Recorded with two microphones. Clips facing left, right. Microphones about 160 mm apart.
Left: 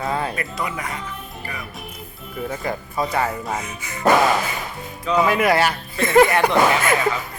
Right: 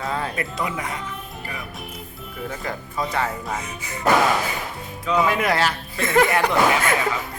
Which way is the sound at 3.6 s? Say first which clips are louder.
Even; 30° right (ahead or behind).